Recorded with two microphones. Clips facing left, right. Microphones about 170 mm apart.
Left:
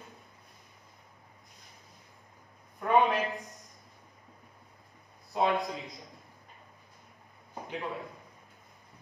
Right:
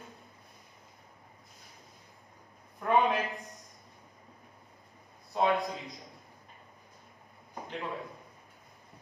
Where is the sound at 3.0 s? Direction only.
Centre (ahead or behind).